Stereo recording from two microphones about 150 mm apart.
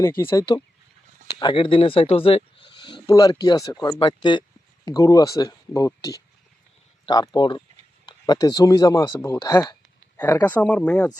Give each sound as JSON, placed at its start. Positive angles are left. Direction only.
{"t": 0.0, "sound": "speech", "side_deg": 15}
{"t": 1.4, "sound": "speech", "side_deg": 30}